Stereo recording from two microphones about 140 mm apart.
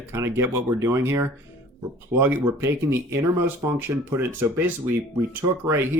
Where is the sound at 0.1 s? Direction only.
20° right (ahead or behind).